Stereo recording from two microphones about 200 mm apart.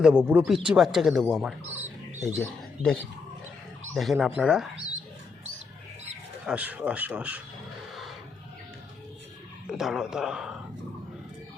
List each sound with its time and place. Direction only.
0.0 s speech: 5° right (ahead or behind)
6.4 s speech: 5° right (ahead or behind)
9.6 s speech: centre (ahead or behind)